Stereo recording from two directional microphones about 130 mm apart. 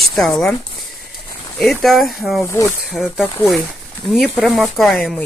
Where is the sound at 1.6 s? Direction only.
Centre (ahead or behind).